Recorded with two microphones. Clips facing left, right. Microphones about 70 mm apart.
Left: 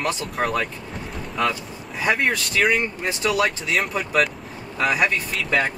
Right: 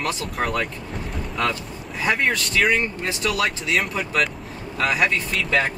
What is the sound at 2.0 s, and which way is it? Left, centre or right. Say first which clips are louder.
Speech: even; centre.